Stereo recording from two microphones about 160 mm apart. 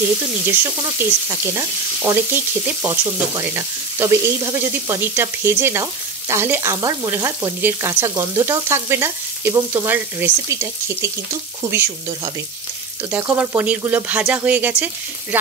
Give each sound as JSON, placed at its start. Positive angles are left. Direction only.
{"t": 0.9, "sound": "frying", "side_deg": -15}
{"t": 13.1, "sound": "frying", "side_deg": -10}